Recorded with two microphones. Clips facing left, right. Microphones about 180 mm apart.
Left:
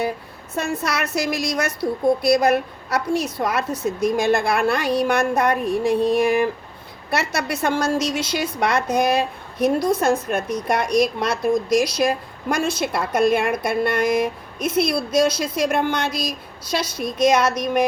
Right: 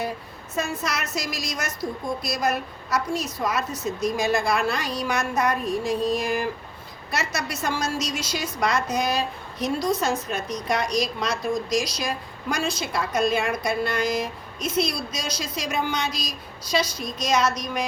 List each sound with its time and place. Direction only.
0.5 s a woman's voice: 60° left (ahead or behind)